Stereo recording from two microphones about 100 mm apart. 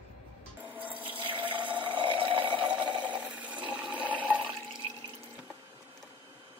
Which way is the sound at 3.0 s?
15° right (ahead or behind).